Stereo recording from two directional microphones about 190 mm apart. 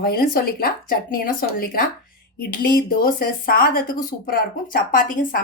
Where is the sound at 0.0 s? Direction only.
50° left (ahead or behind).